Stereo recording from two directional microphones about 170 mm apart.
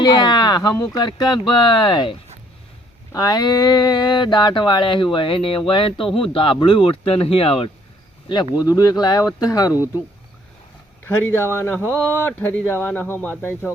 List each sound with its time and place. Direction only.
0.0 s speech: 25° left (ahead or behind)
8.5 s speech: 20° left (ahead or behind)
9.7 s speech: 10° right (ahead or behind)
11.0 s speech: 15° left (ahead or behind)